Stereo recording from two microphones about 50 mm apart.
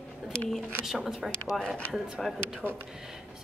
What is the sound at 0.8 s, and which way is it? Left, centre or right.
A woman's voice, centre.